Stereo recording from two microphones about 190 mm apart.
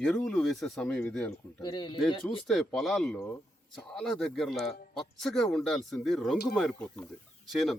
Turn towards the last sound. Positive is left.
turn(degrees=0)  # may be behind; listen again after turning